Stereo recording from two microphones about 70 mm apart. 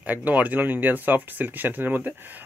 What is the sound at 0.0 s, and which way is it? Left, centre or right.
Speech, right.